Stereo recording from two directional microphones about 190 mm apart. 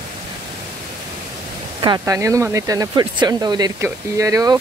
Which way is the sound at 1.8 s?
20° right (ahead or behind).